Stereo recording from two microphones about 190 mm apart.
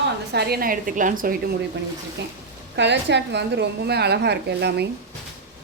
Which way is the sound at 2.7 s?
65° right (ahead or behind).